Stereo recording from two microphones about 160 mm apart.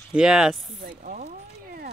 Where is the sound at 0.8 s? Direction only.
70° right (ahead or behind).